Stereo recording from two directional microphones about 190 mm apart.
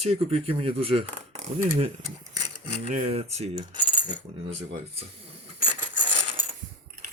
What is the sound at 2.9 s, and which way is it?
Speech, 35° right (ahead or behind).